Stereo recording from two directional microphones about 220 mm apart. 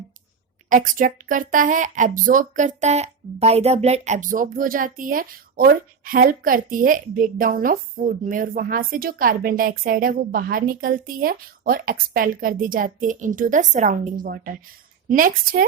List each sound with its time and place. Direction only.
0.7 s speech: 35° right (ahead or behind)